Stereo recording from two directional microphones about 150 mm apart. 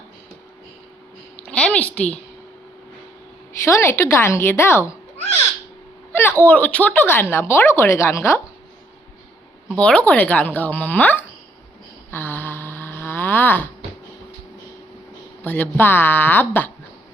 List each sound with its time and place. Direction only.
1.4 s a woman's voice: 5° left (ahead or behind)
3.5 s speech: 20° left (ahead or behind)
6.1 s speech: 15° left (ahead or behind)
9.7 s speech: 10° left (ahead or behind)
12.1 s snoring: 15° left (ahead or behind)
15.4 s speech: 10° left (ahead or behind)